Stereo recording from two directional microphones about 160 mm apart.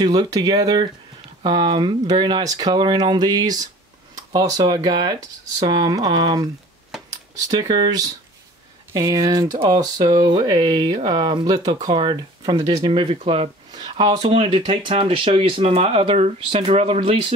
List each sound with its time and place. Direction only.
0.0 s speech: 25° right (ahead or behind)
7.1 s a sound: 25° right (ahead or behind)
7.7 s speech: 25° right (ahead or behind)
13.7 s speech: 25° right (ahead or behind)